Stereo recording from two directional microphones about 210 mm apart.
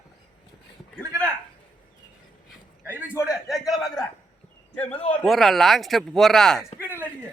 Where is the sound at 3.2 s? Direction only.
Centre (ahead or behind).